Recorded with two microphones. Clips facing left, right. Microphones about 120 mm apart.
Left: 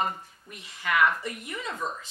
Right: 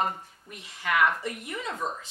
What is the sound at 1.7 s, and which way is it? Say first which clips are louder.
Speech: even; 30° right (ahead or behind).